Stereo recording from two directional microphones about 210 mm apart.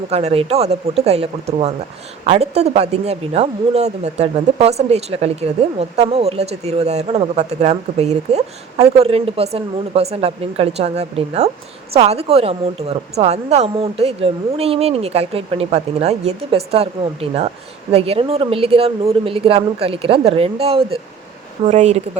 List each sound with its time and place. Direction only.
0.1 s a woman's voice: 30° right (ahead or behind)